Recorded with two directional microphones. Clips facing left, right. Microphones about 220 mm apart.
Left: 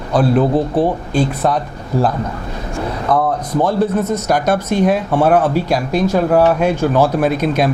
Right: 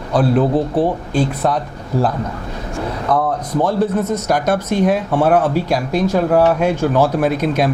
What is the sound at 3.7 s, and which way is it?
Speech, 10° left (ahead or behind).